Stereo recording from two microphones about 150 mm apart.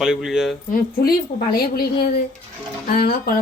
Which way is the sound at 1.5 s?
90° left.